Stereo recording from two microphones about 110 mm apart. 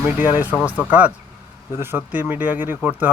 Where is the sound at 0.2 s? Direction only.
15° right (ahead or behind).